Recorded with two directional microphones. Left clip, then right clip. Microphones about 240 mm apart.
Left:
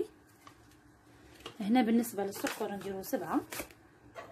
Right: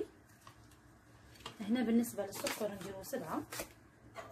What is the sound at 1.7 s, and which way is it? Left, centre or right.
A woman's voice, left.